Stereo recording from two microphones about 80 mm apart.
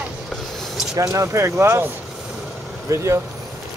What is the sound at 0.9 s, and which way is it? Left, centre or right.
Speech, right.